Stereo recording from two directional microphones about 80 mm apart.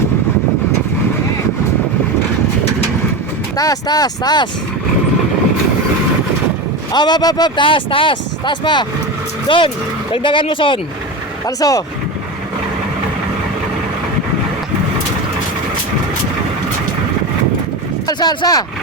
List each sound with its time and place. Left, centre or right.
3.6 s speech: left
6.9 s speech: left
9.5 s speech: left
11.4 s speech: left
18.1 s speech: left